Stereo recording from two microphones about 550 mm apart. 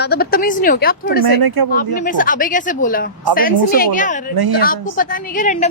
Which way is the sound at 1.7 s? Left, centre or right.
Centre.